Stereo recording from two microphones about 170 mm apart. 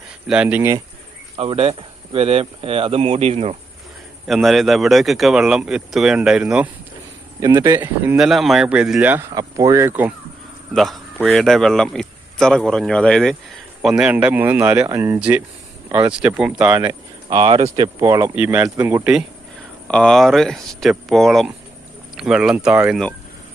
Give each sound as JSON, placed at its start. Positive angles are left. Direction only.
{"t": 0.3, "sound": "speech", "side_deg": -5}
{"t": 1.4, "sound": "speech", "side_deg": -35}
{"t": 4.3, "sound": "speech", "side_deg": 0}
{"t": 7.3, "sound": "speech", "side_deg": -20}
{"t": 9.3, "sound": "speech", "side_deg": -20}
{"t": 10.8, "sound": "speech", "side_deg": 0}
{"t": 16.8, "sound": "speech", "side_deg": -25}
{"t": 19.9, "sound": "speech", "side_deg": 5}